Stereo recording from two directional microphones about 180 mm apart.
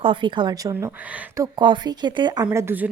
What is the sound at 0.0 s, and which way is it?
Speech, 30° right (ahead or behind).